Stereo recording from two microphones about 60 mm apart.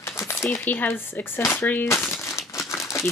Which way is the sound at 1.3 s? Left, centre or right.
Left.